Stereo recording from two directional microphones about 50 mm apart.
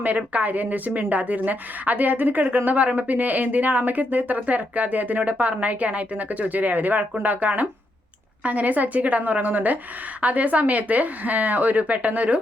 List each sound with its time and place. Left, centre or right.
0.2 s speech: right